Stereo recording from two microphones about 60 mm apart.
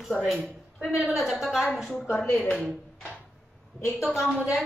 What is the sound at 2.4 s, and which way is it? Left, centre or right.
Speech, left.